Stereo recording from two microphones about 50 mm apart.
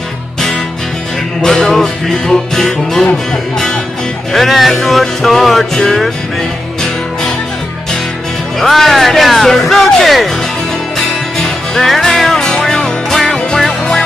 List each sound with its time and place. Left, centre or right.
1.4 s music: centre
4.3 s speech: centre
8.5 s speech: centre
11.3 s music: centre